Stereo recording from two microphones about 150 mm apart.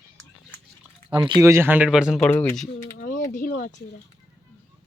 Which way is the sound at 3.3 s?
65° left (ahead or behind).